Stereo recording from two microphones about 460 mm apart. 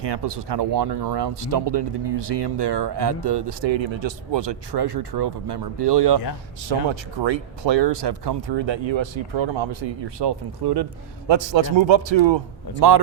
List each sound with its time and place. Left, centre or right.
0.1 s speech: right
6.7 s speech: right
7.2 s speech: right
11.3 s speech: right
12.8 s speech: right